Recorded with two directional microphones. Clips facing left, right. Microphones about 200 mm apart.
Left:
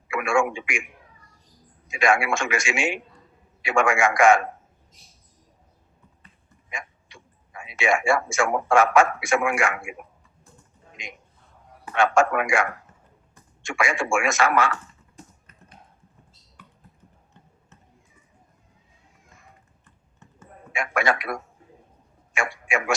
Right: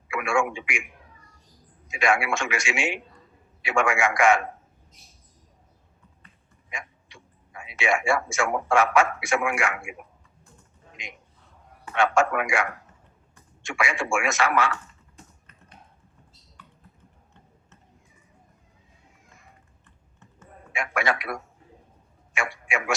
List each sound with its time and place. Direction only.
0.1 s a man's voice: 45° left (ahead or behind)
1.9 s a man's voice: 45° left (ahead or behind)
6.7 s tick-tock: 45° left (ahead or behind)
7.6 s a man's voice: 45° left (ahead or behind)
11.9 s a man's voice: 45° left (ahead or behind)
20.7 s a man's voice: 45° left (ahead or behind)
22.4 s a man's voice: 45° left (ahead or behind)